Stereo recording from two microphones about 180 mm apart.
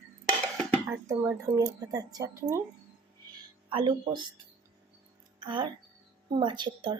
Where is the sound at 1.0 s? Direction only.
15° right (ahead or behind).